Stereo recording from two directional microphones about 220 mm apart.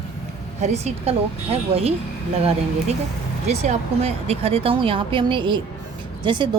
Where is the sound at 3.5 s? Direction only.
30° right (ahead or behind).